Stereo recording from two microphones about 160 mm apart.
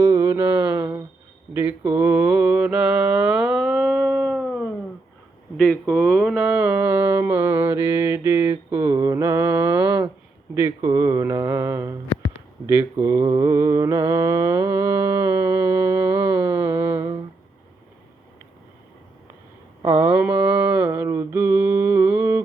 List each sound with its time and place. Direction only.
0.0 s music: 15° right (ahead or behind)
1.5 s mantra: 10° right (ahead or behind)
5.5 s speech: 5° left (ahead or behind)
5.8 s mantra: 5° right (ahead or behind)
20.0 s mantra: 10° right (ahead or behind)